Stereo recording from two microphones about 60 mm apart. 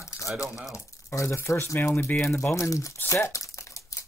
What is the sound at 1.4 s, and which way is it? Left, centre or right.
Speech, left.